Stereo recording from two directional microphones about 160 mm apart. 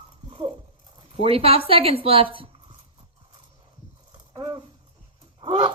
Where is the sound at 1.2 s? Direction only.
35° right (ahead or behind).